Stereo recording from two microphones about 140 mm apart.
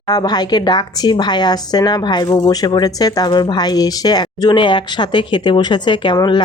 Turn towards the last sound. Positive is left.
turn(degrees=30)  # may be behind; listen again after turning